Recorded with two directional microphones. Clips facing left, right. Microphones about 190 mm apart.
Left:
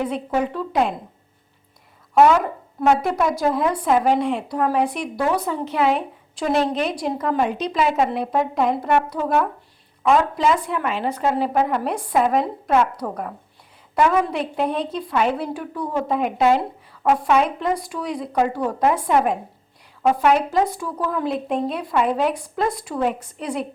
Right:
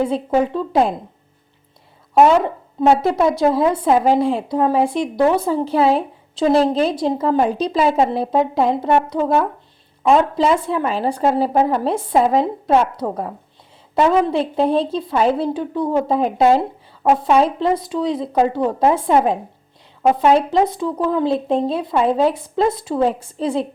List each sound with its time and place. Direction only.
0.0 s a woman's voice: 30° right (ahead or behind)
2.1 s a woman's voice: 25° right (ahead or behind)